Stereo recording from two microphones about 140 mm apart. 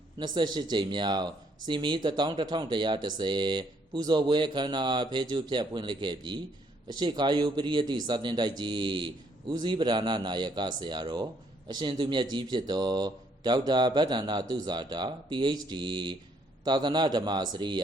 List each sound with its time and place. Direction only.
0.2 s speech: 30° right (ahead or behind)